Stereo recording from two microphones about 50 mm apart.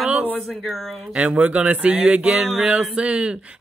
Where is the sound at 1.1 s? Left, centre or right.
Right.